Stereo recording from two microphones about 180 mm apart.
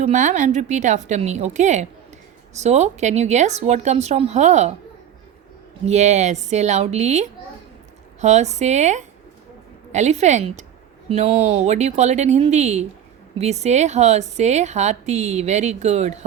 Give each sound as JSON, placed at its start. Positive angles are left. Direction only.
{"t": 0.0, "sound": "a woman's voice", "side_deg": -45}
{"t": 5.8, "sound": "a woman's voice", "side_deg": -40}